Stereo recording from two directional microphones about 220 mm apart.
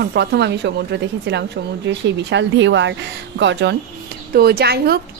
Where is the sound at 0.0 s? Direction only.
50° right (ahead or behind).